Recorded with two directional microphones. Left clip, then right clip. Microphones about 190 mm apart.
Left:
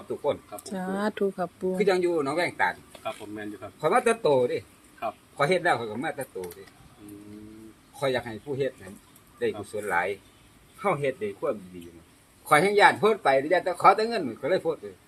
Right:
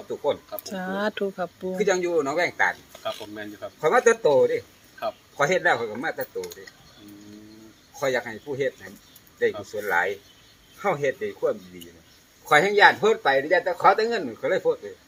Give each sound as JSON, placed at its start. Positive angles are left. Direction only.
{"t": 0.1, "sound": "speech", "side_deg": 10}
{"t": 3.0, "sound": "speech", "side_deg": -40}
{"t": 3.8, "sound": "speech", "side_deg": 10}
{"t": 7.9, "sound": "speech", "side_deg": 10}